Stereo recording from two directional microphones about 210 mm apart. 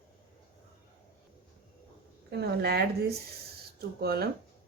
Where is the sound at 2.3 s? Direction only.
50° right (ahead or behind).